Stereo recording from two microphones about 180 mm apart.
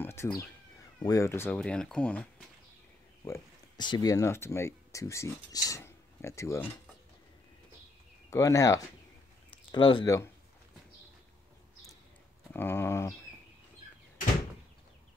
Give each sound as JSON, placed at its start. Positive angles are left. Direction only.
{"t": 0.0, "sound": "cat", "side_deg": 15}
{"t": 0.9, "sound": "speech", "side_deg": 20}
{"t": 3.3, "sound": "speech", "side_deg": 20}
{"t": 8.3, "sound": "speech", "side_deg": 20}
{"t": 12.5, "sound": "speech", "side_deg": 10}